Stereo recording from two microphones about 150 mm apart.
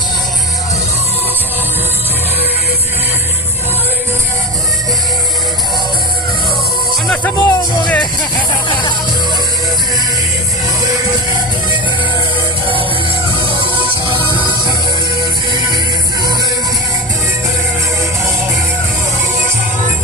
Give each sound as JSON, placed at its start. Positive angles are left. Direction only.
{"t": 7.1, "sound": "music", "side_deg": 10}
{"t": 14.1, "sound": "music", "side_deg": -35}